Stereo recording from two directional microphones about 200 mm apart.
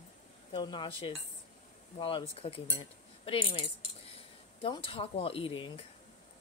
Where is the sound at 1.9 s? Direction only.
25° left (ahead or behind).